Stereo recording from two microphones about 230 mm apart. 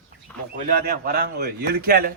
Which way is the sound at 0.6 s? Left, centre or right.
Right.